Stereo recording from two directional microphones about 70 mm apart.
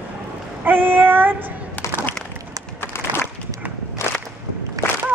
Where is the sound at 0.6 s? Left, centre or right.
Right.